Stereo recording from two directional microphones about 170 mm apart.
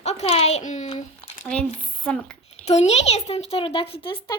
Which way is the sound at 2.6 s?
40° left (ahead or behind).